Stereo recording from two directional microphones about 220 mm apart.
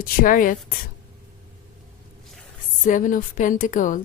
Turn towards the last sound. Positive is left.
turn(degrees=35)  # may be behind; listen again after turning